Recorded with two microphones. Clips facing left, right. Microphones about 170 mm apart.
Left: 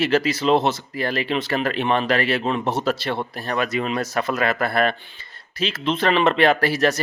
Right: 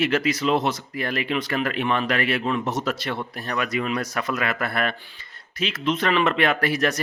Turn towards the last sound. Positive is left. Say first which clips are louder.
# left 3 dB
turn(degrees=30)  # may be behind; listen again after turning